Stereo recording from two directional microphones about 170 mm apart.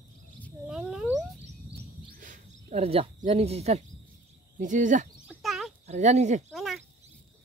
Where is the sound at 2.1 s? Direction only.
50° right (ahead or behind).